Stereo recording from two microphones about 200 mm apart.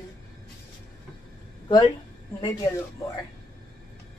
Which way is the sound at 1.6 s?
20° left (ahead or behind).